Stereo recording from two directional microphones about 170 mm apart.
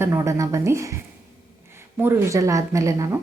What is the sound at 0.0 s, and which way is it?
Speech, 15° right (ahead or behind).